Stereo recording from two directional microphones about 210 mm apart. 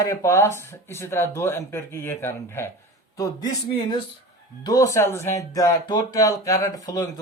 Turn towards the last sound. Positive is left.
turn(degrees=15)  # may be behind; listen again after turning